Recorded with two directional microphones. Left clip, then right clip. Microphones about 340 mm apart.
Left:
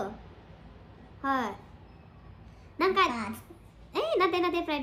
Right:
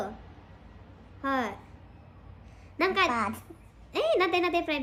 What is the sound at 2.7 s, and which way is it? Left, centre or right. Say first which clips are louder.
Speech: left 1 dB; centre.